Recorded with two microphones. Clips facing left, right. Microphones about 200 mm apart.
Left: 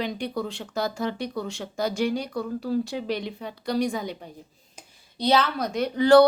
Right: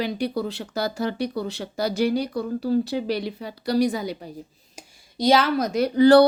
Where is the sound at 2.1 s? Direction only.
35° right (ahead or behind).